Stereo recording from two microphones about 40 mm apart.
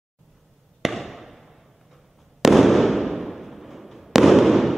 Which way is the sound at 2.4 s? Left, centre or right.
Centre.